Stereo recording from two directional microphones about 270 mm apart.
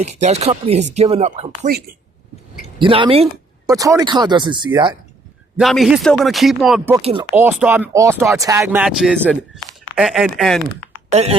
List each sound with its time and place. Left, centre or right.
0.0 s speech: right
2.7 s speech: centre
5.5 s speech: centre
7.0 s speech: right
7.3 s speech: centre
11.1 s speech: right